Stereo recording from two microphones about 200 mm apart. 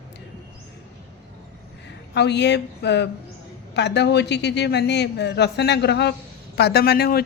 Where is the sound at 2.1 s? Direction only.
60° left (ahead or behind).